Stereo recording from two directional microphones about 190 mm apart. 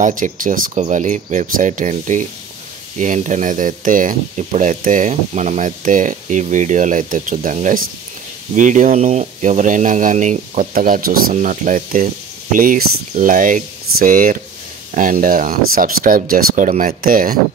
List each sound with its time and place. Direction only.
0.0 s speech: 45° right (ahead or behind)